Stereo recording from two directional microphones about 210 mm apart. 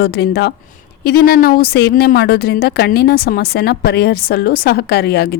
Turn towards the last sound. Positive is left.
turn(degrees=50)  # may be behind; listen again after turning